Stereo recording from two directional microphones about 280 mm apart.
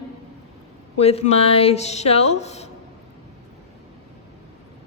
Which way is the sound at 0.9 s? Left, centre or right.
Left.